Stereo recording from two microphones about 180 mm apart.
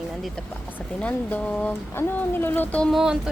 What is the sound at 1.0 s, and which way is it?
Speech, 5° left (ahead or behind).